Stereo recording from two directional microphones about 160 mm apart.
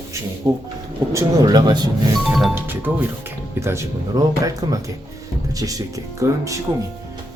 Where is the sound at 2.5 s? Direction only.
15° right (ahead or behind).